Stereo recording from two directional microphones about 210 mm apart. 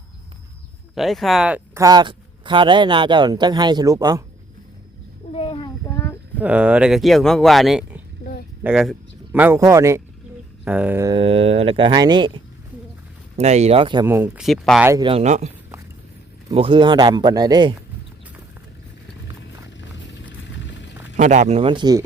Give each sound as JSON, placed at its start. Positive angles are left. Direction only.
{"t": 0.9, "sound": "speech", "side_deg": 0}
{"t": 5.3, "sound": "a sound", "side_deg": 25}
{"t": 5.9, "sound": "a sound", "side_deg": 10}
{"t": 6.4, "sound": "speech", "side_deg": -5}
{"t": 11.1, "sound": "speech", "side_deg": -25}
{"t": 13.3, "sound": "speech", "side_deg": -30}
{"t": 14.1, "sound": "speech", "side_deg": -5}
{"t": 14.8, "sound": "speech", "side_deg": -15}
{"t": 15.1, "sound": "speech", "side_deg": -30}
{"t": 21.2, "sound": "speech", "side_deg": -35}